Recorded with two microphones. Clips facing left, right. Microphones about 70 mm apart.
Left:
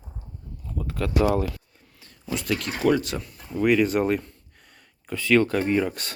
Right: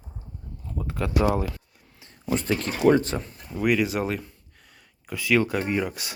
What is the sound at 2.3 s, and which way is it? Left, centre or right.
Speech, right.